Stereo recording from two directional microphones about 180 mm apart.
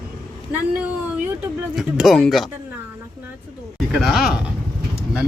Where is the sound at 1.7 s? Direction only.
Centre (ahead or behind).